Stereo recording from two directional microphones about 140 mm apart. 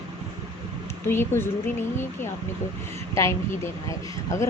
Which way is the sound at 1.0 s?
15° left (ahead or behind).